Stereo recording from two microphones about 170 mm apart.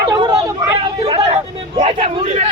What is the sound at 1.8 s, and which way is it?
Speech, 40° right (ahead or behind).